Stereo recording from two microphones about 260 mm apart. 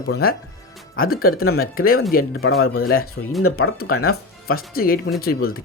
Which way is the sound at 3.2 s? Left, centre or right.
Left.